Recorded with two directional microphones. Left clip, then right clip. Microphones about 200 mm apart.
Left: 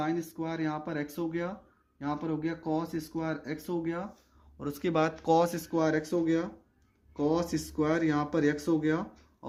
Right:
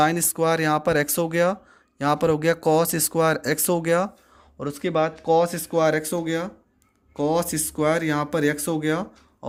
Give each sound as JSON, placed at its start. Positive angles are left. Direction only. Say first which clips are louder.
{"t": 0.0, "sound": "speech", "louder": "right 13 dB", "side_deg": -55}
{"t": 4.6, "sound": "speech", "louder": "right 6 dB", "side_deg": -15}
{"t": 5.5, "sound": "speech", "louder": "right 8 dB", "side_deg": -20}